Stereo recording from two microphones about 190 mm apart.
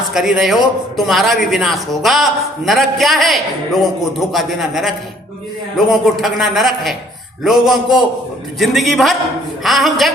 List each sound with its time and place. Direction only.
0.1 s speech: centre (ahead or behind)